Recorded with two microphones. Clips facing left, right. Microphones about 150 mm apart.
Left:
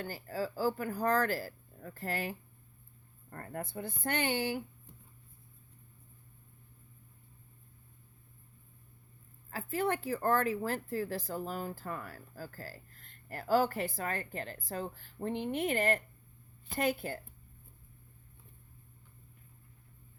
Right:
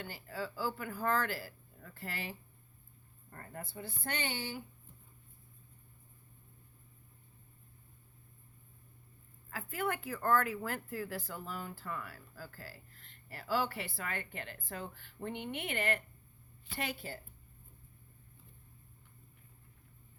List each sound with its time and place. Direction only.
0.0 s speech: 40° left (ahead or behind)
9.5 s speech: 40° left (ahead or behind)